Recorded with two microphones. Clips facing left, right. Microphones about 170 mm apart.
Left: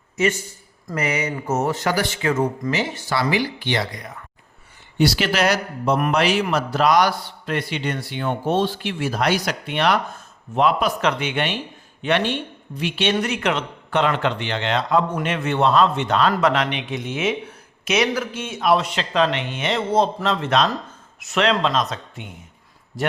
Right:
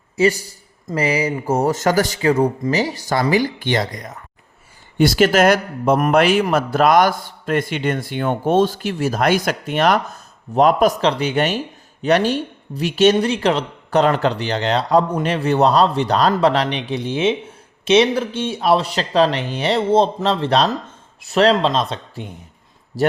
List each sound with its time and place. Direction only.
0.2 s a man's voice: 35° right (ahead or behind)
13.1 s speech: 30° right (ahead or behind)